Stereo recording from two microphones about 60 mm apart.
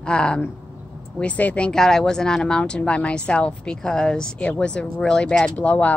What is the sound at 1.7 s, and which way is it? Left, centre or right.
Speech, centre.